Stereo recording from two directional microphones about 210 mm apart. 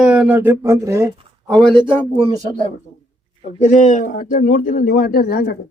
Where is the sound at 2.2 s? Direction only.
25° right (ahead or behind).